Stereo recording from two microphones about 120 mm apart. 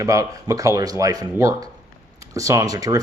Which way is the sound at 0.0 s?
25° right (ahead or behind).